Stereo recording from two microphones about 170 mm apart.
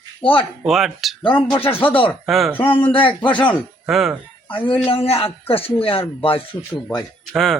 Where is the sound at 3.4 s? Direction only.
5° left (ahead or behind).